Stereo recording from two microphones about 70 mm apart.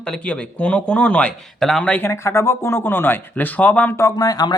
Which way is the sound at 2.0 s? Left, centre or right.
Left.